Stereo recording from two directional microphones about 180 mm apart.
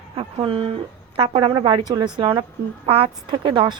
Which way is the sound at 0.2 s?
30° right (ahead or behind).